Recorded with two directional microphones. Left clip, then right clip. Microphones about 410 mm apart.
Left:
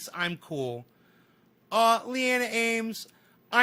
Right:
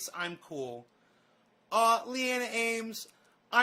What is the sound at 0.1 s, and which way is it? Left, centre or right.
A man's voice, left.